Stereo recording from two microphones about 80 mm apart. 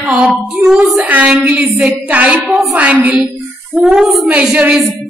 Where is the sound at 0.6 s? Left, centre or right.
Centre.